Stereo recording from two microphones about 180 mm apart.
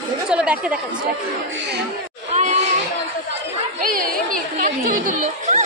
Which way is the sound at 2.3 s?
40° right (ahead or behind).